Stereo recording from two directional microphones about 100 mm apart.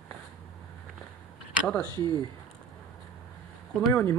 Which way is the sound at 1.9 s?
45° right (ahead or behind).